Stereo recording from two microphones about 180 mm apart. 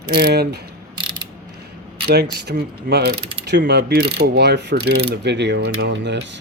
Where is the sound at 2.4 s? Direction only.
65° right (ahead or behind); by 6.1 s 80° right.